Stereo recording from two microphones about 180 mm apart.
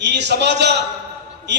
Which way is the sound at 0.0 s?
70° right (ahead or behind).